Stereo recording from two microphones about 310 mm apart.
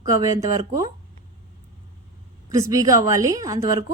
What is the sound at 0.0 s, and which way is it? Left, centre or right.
Speech, centre.